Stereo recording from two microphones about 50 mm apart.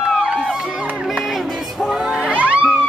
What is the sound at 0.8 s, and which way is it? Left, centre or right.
Music, right.